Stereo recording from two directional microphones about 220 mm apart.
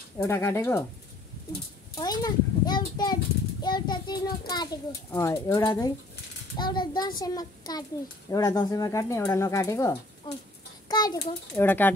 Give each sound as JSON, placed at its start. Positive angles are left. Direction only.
{"t": 0.2, "sound": "speech", "side_deg": 10}
{"t": 2.0, "sound": "a child's voice", "side_deg": 15}